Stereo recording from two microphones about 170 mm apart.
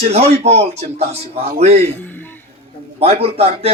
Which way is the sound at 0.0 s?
40° right (ahead or behind).